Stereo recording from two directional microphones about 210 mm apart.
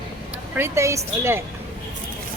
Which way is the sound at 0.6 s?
15° right (ahead or behind).